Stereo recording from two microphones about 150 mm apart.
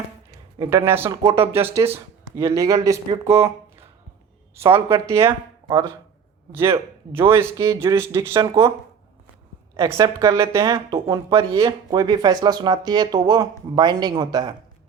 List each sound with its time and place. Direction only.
0.6 s a man's voice: 15° right (ahead or behind)
1.2 s speech: 40° right (ahead or behind)
1.6 s a man's voice: 15° right (ahead or behind)
5.0 s a man's voice: 20° right (ahead or behind)
9.7 s speech: 25° right (ahead or behind)